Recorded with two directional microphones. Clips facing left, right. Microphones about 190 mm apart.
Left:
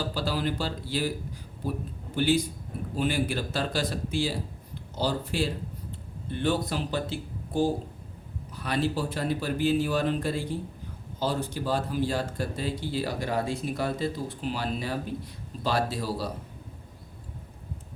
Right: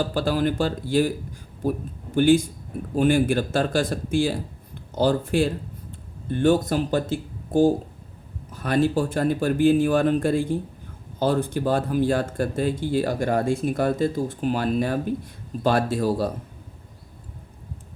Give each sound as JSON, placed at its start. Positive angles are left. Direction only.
{"t": 0.0, "sound": "speech", "side_deg": -50}
{"t": 2.1, "sound": "speech", "side_deg": -50}